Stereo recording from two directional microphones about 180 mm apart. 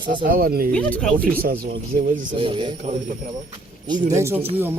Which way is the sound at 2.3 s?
30° right (ahead or behind).